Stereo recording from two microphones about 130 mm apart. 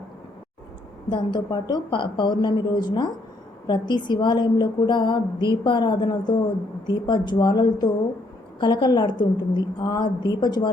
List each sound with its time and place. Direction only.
1.1 s a woman's voice: 35° left (ahead or behind)